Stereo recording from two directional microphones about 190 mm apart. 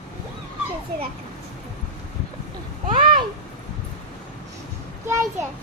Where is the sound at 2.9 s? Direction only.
25° right (ahead or behind).